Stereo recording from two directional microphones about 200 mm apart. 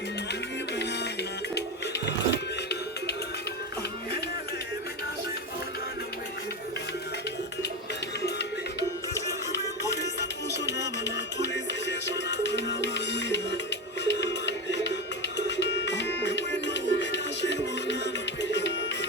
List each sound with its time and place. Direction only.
1.5 s music: 60° left (ahead or behind)
9.9 s music: 60° left (ahead or behind)